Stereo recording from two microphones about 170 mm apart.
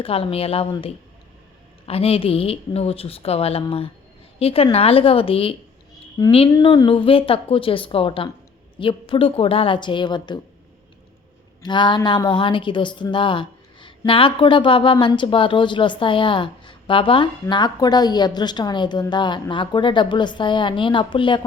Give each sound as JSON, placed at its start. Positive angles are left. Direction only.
{"t": 0.0, "sound": "speech", "side_deg": 35}
{"t": 6.2, "sound": "a woman's voice", "side_deg": 20}
{"t": 11.6, "sound": "a woman's voice", "side_deg": 25}